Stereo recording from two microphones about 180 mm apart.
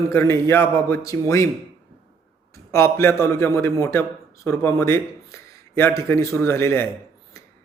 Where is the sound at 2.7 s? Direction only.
15° left (ahead or behind).